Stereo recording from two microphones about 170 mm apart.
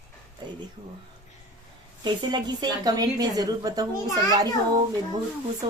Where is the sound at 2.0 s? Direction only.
25° right (ahead or behind).